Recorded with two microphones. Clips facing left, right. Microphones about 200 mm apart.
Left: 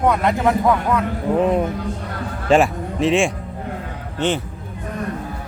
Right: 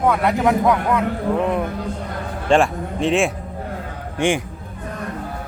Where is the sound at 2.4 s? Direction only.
5° left (ahead or behind).